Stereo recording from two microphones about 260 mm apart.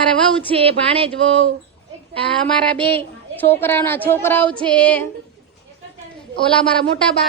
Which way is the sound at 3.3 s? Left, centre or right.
Centre.